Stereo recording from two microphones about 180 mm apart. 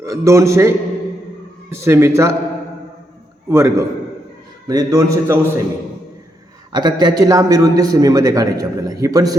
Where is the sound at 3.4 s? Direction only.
15° right (ahead or behind).